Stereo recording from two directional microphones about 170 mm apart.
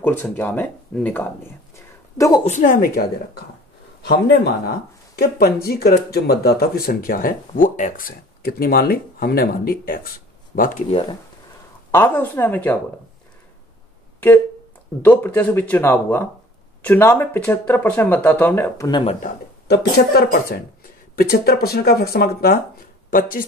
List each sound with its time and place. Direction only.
0.0 s a woman's voice: 10° left (ahead or behind)
2.4 s a woman's voice: 50° left (ahead or behind)
10.9 s speech: 30° left (ahead or behind)
11.9 s speech: 10° left (ahead or behind)
15.0 s speech: 10° left (ahead or behind)
18.9 s speech: 30° left (ahead or behind)
20.2 s speech: 65° left (ahead or behind)